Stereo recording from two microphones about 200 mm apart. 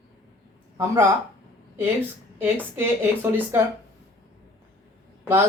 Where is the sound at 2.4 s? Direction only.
10° right (ahead or behind).